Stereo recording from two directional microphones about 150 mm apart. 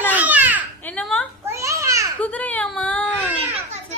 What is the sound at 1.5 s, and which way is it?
Babbling, 20° right (ahead or behind).